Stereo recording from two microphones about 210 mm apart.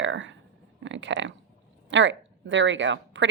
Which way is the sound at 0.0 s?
60° right (ahead or behind).